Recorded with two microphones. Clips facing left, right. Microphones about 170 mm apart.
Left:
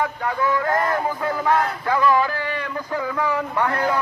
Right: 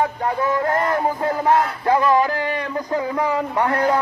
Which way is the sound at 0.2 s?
25° right (ahead or behind).